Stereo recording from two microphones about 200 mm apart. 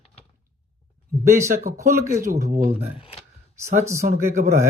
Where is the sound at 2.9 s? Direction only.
25° left (ahead or behind).